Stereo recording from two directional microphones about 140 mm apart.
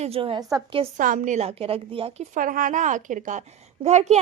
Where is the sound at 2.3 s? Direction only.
75° right (ahead or behind); by 4.2 s 55° right (ahead or behind).